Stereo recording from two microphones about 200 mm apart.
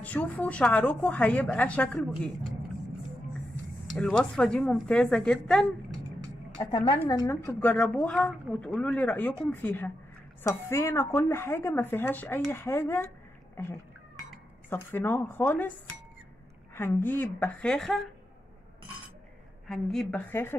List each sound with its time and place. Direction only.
0.0 s speech: 10° left (ahead or behind)
3.9 s a woman's voice: 5° left (ahead or behind)
6.5 s a woman's voice: 20° left (ahead or behind)
14.7 s speech: 10° left (ahead or behind)
16.7 s speech: 10° left (ahead or behind)
19.7 s a woman's voice: centre (ahead or behind)